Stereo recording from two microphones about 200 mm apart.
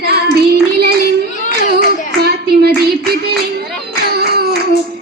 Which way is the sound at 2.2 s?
50° right (ahead or behind).